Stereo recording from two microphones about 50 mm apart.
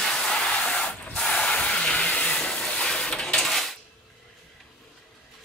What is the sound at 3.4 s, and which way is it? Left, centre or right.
Coin, centre.